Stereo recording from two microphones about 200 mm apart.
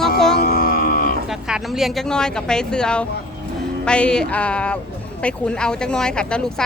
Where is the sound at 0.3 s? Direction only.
50° left (ahead or behind).